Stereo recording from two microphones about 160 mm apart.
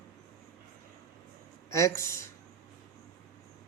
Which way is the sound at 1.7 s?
20° left (ahead or behind).